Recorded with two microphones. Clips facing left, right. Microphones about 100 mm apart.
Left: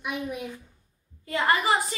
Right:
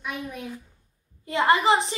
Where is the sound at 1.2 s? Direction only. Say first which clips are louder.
Right 4 dB; 20° right (ahead or behind).